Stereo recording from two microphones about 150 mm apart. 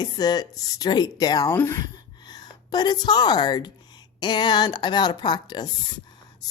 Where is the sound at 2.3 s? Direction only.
25° left (ahead or behind).